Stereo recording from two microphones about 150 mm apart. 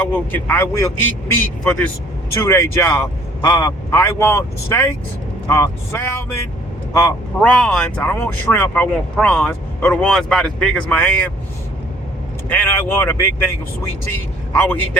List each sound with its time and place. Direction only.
0.0 s speech: 15° left (ahead or behind)
2.3 s speech: 20° left (ahead or behind)
7.0 s speech: 5° left (ahead or behind)
12.5 s speech: 10° left (ahead or behind)
14.5 s speech: 10° left (ahead or behind)